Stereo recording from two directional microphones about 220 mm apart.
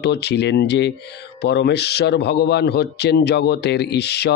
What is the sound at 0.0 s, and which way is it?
Speech, 50° left (ahead or behind).